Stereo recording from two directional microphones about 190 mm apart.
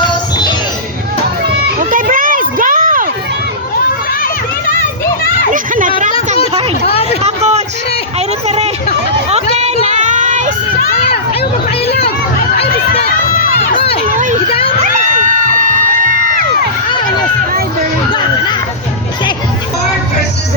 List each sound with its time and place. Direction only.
1.8 s children playing: 45° right (ahead or behind)
4.2 s children playing: 50° left (ahead or behind)
5.5 s children playing: 45° right (ahead or behind)
6.8 s hubbub: 30° left (ahead or behind)
7.2 s a sound: 35° right (ahead or behind)
8.4 s hubbub: 35° right (ahead or behind)
9.3 s a sound: 35° right (ahead or behind)
11.9 s a sound: 60° left (ahead or behind)
13.7 s crowd: 30° left (ahead or behind)
14.1 s vehicle: 40° right (ahead or behind)
15.0 s a sound: 40° right (ahead or behind)
18.1 s goat: 20° left (ahead or behind)